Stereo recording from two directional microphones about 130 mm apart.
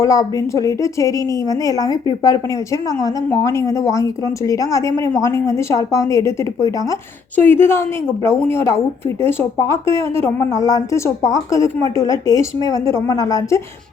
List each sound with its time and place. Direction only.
0.0 s a woman's voice: 25° left (ahead or behind)